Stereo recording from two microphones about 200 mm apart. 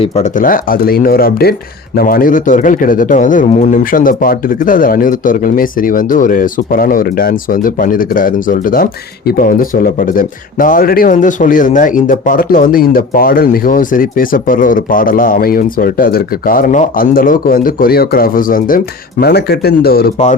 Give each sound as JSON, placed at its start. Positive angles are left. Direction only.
{"t": 0.0, "sound": "speech", "side_deg": 35}